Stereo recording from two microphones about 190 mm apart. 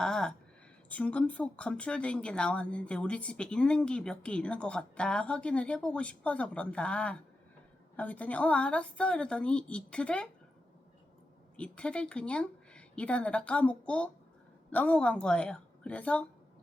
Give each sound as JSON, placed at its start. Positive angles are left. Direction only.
{"t": 0.0, "sound": "a sound", "side_deg": 5}
{"t": 0.9, "sound": "speech", "side_deg": 5}
{"t": 11.5, "sound": "speech", "side_deg": 5}